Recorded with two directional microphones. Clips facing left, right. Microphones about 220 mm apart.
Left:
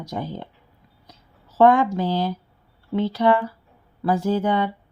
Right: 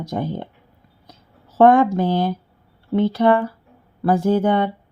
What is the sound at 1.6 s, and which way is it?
Speech, 55° right (ahead or behind).